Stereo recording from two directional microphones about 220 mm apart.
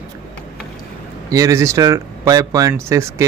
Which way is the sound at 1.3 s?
15° right (ahead or behind).